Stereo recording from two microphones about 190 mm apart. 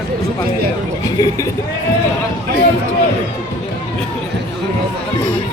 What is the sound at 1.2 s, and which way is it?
Speech, 15° left (ahead or behind).